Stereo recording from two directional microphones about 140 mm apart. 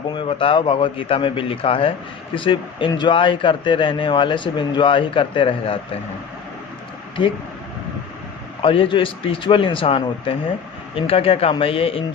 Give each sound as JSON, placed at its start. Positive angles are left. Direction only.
{"t": 0.1, "sound": "speech", "side_deg": 40}
{"t": 8.6, "sound": "a man's voice", "side_deg": 40}